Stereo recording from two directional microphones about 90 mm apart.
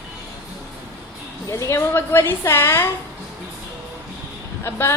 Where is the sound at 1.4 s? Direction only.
35° left (ahead or behind).